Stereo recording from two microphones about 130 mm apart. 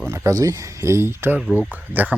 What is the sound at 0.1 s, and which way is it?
Speech, 25° right (ahead or behind).